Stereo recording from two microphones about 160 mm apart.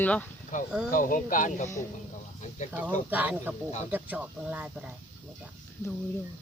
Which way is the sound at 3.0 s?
10° right (ahead or behind).